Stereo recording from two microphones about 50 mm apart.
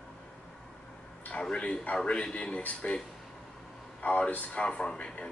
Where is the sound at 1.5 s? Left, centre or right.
Left.